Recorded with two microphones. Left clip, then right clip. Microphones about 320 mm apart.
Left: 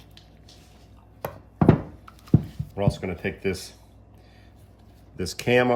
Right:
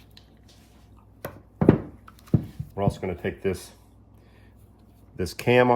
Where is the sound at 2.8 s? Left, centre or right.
Centre.